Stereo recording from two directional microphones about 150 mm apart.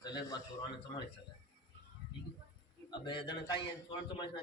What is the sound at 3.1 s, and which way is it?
Speech, 30° left (ahead or behind).